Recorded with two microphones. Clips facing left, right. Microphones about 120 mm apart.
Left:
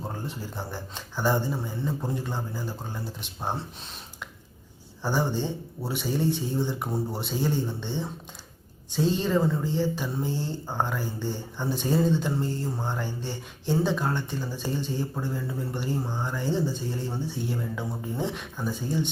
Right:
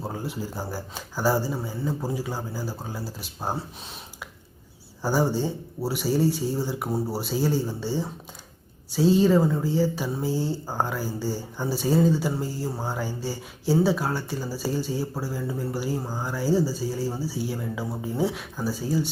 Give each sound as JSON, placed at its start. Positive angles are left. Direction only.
{"t": 0.0, "sound": "speech", "side_deg": -5}
{"t": 5.0, "sound": "speech", "side_deg": -10}